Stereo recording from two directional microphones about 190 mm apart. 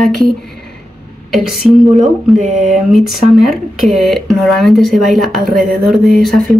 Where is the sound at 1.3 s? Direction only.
Centre (ahead or behind).